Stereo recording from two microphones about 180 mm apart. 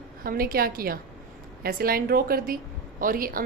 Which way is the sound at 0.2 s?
55° right (ahead or behind).